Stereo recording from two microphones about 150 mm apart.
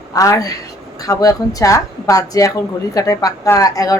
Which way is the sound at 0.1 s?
25° left (ahead or behind).